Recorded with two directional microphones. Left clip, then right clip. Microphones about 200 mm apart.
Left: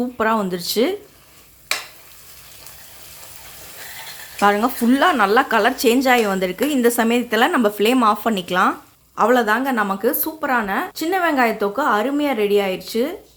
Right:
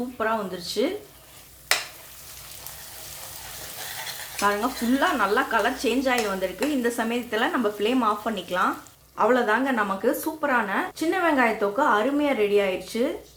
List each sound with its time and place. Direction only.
0.2 s speech: 60° left (ahead or behind)
4.4 s speech: 60° left (ahead or behind); by 13.1 s 40° left (ahead or behind)